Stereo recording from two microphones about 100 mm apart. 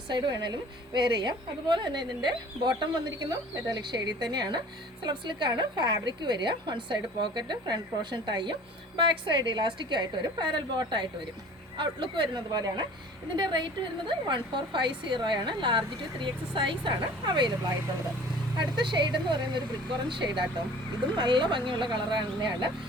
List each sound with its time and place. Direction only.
0.1 s a woman's voice: 45° right (ahead or behind)
18.6 s a woman's voice: 50° right (ahead or behind)